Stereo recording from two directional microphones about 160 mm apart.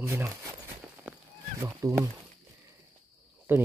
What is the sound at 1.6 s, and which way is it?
Speech, 20° right (ahead or behind).